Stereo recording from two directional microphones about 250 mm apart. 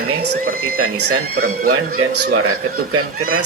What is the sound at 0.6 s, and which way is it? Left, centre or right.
A man's voice, right.